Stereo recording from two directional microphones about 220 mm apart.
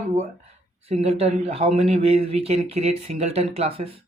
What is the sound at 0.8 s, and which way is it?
Speech, 25° right (ahead or behind).